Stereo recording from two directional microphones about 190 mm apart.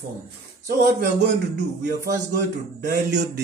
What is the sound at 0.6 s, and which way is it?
Speech, 55° right (ahead or behind).